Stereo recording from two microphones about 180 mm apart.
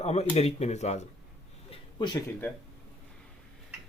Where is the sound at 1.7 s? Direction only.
25° left (ahead or behind).